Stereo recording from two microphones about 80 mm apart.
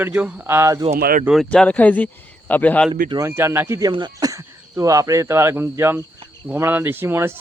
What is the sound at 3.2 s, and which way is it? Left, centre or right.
Speech, right.